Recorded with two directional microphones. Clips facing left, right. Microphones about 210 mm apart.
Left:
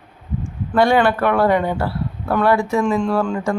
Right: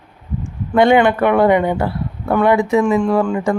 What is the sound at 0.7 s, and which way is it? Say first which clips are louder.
Speech: right 3 dB; 20° right (ahead or behind).